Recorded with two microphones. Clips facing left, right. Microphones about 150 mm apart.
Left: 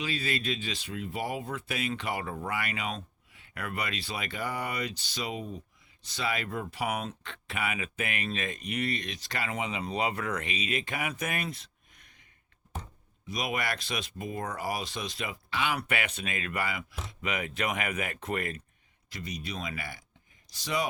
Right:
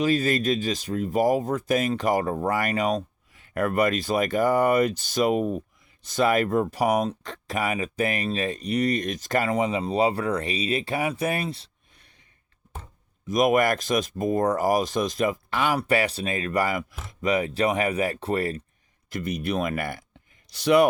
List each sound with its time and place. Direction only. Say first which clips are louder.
0.0 s speech: right 11 dB; 45° right (ahead or behind)
13.2 s speech: right 13 dB; 45° right (ahead or behind)
19.1 s speech: right 11 dB; 55° right (ahead or behind)
20.5 s speech: right 13 dB; 65° right (ahead or behind)